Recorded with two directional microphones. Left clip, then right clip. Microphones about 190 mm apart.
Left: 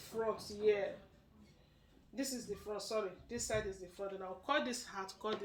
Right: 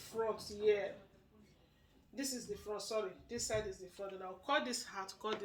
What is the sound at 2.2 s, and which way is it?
Speech, 20° right (ahead or behind).